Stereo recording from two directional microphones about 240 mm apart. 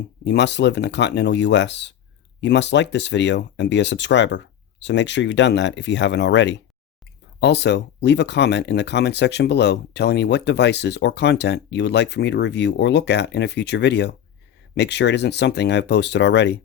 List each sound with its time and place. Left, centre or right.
0.3 s speech: left